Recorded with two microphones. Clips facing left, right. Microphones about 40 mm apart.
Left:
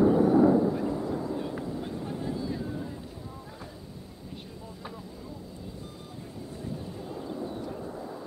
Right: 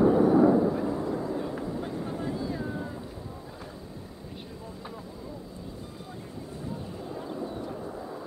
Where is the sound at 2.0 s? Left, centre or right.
Right.